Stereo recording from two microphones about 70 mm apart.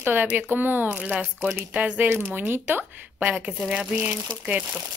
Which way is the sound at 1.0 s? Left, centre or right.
Centre.